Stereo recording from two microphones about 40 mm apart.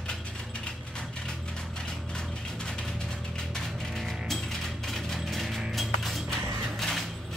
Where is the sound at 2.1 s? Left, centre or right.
Centre.